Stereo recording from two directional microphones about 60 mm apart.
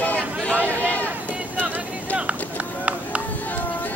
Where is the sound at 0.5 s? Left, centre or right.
Right.